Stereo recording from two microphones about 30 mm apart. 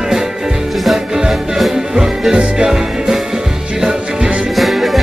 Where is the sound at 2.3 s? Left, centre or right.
Right.